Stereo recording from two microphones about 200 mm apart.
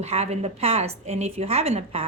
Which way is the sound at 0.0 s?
35° right (ahead or behind).